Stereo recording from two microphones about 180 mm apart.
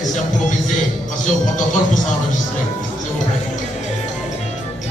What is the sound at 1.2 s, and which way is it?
Speech, 45° left (ahead or behind).